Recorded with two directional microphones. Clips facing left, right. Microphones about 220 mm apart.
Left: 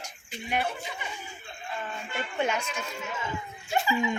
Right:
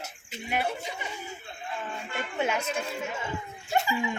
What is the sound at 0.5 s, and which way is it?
Speech, 5° right (ahead or behind).